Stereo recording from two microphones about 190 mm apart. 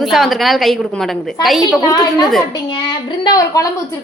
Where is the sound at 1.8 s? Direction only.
20° left (ahead or behind).